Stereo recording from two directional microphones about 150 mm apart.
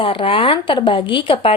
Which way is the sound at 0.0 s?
35° left (ahead or behind).